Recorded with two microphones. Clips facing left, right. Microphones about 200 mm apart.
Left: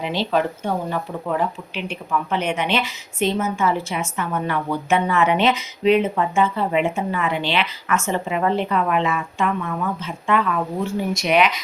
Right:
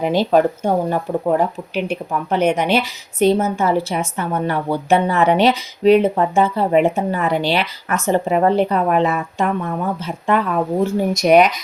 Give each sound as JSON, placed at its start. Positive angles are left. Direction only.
{"t": 0.0, "sound": "speech", "side_deg": -45}